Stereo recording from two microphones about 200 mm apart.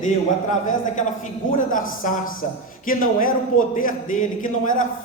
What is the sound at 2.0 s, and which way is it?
A man's voice, 40° left (ahead or behind).